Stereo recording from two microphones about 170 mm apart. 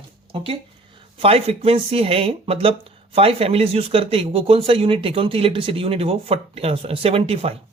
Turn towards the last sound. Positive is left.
turn(degrees=-35)  # may be behind; listen again after turning